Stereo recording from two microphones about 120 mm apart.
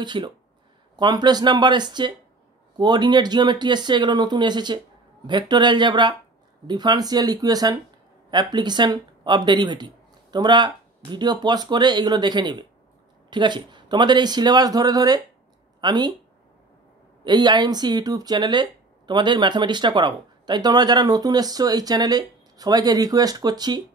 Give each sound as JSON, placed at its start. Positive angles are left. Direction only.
{"t": 0.0, "sound": "speech", "side_deg": -40}
{"t": 17.2, "sound": "speech", "side_deg": -40}